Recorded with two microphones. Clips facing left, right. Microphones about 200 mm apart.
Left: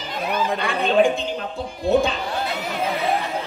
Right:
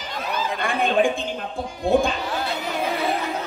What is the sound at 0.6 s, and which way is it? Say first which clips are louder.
Speech: left 1 dB; 50° right (ahead or behind).